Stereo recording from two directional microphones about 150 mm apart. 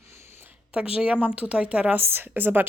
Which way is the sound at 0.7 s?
5° right (ahead or behind).